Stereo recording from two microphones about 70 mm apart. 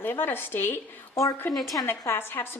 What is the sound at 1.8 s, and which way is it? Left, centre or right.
Speech, left.